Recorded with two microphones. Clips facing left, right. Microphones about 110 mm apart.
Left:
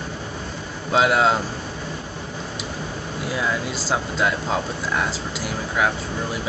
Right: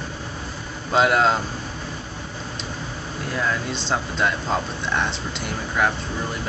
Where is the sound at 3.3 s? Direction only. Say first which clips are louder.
Even; 5° left (ahead or behind).